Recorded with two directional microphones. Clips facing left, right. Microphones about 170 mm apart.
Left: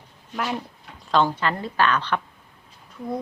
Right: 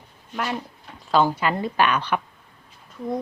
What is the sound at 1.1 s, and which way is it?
A woman's voice, 10° right (ahead or behind).